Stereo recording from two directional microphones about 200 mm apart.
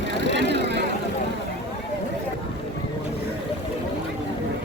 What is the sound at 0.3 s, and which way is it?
Vehicle, 60° right (ahead or behind).